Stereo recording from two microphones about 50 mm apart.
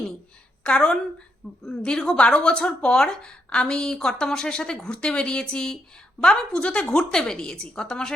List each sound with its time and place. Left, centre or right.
0.6 s a woman's voice: left